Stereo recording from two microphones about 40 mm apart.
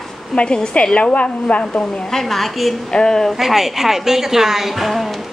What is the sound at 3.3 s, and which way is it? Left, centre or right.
A woman's voice, centre.